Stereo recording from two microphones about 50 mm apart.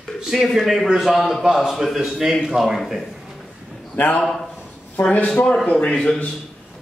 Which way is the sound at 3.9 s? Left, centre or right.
Left.